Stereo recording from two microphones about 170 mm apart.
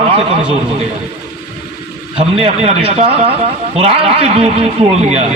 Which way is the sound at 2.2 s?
35° right (ahead or behind).